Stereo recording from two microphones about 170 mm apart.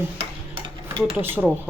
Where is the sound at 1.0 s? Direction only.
10° right (ahead or behind).